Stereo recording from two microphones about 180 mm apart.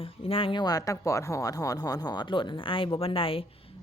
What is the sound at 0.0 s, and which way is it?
Speech, 30° left (ahead or behind).